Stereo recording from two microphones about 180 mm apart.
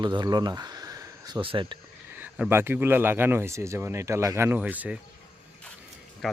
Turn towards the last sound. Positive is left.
turn(degrees=0)  # may be behind; listen again after turning